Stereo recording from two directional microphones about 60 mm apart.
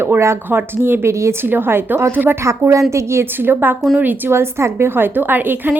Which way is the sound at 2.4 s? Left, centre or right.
Right.